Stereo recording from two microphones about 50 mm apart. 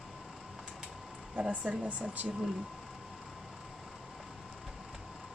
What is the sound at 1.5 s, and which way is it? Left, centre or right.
Speech, right.